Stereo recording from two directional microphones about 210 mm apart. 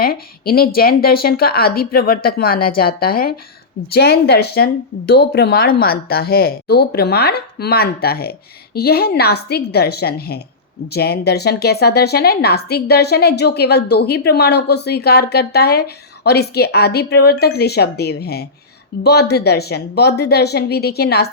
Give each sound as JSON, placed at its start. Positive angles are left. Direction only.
{"t": 0.0, "sound": "a woman's voice", "side_deg": 45}